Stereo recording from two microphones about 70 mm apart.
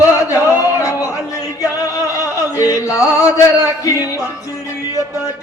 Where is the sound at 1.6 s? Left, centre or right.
Left.